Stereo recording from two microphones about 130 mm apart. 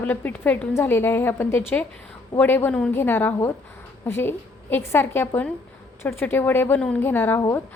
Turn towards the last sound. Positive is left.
turn(degrees=15)  # may be behind; listen again after turning